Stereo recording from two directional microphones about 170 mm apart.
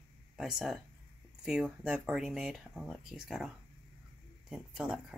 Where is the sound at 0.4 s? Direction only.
Centre (ahead or behind).